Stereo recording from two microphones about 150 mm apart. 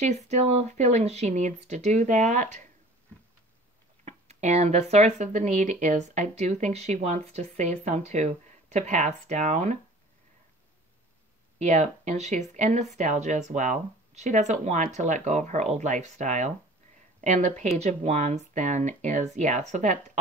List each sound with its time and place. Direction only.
0.0 s speech: 50° right (ahead or behind)
4.0 s speech: 50° right (ahead or behind)
11.5 s speech: 50° right (ahead or behind)